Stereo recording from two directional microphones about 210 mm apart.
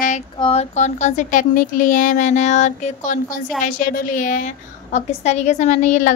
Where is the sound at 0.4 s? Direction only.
30° left (ahead or behind).